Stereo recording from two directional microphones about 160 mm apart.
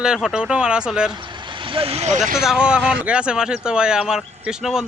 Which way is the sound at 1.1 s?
30° right (ahead or behind).